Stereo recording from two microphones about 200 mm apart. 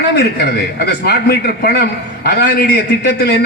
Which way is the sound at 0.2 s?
55° left (ahead or behind).